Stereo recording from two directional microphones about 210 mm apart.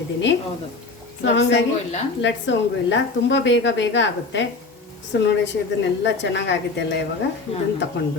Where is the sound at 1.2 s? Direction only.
55° left (ahead or behind).